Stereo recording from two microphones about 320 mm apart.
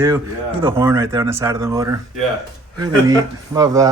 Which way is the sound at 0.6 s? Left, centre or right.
Centre.